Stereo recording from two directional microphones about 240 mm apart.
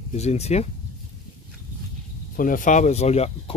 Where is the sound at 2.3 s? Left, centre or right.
Left.